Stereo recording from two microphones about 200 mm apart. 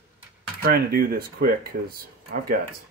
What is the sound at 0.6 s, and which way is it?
Speech, 50° right (ahead or behind).